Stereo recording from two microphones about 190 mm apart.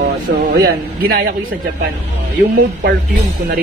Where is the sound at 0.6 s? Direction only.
50° right (ahead or behind).